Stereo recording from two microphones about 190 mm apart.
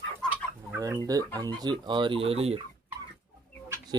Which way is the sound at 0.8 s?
20° right (ahead or behind).